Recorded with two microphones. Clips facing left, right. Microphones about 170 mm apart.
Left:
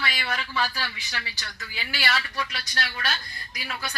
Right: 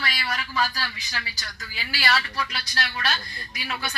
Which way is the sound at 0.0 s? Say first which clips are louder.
Even; 40° right (ahead or behind).